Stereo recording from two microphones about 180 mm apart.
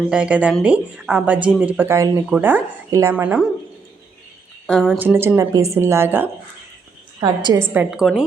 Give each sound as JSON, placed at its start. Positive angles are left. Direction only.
{"t": 0.1, "sound": "speech", "side_deg": -5}
{"t": 4.6, "sound": "a woman's voice", "side_deg": 5}
{"t": 4.9, "sound": "speech", "side_deg": -10}
{"t": 7.2, "sound": "a woman's voice", "side_deg": -25}
{"t": 7.7, "sound": "a woman's voice", "side_deg": -5}